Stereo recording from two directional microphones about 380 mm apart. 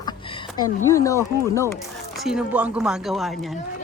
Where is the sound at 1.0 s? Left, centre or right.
Centre.